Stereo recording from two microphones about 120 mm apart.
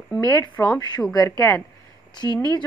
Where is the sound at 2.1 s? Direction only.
35° left (ahead or behind).